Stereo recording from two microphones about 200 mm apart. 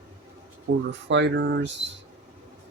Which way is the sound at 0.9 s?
60° right (ahead or behind).